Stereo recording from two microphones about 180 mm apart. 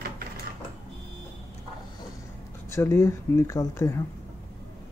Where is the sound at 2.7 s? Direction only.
15° left (ahead or behind).